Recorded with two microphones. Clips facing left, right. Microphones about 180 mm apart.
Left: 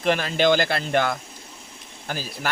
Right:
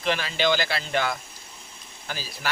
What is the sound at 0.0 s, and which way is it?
Speech, 50° left (ahead or behind).